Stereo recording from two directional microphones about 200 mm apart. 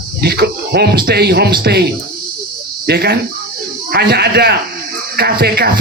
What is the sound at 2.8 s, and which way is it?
A man's voice, 55° right (ahead or behind).